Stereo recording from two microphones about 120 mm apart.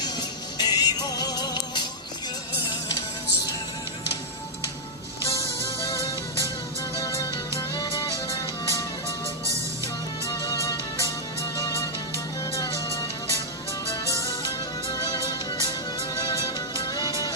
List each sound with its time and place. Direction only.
0.0 s music: 35° left (ahead or behind)
7.0 s music: 25° left (ahead or behind)
8.7 s music: 25° left (ahead or behind)
14.1 s music: 25° left (ahead or behind)